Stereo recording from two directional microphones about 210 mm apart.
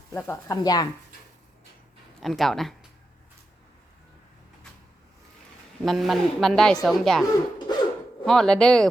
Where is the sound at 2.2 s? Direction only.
Centre (ahead or behind).